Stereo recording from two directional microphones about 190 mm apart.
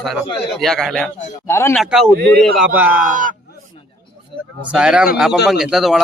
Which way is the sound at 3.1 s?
45° right (ahead or behind).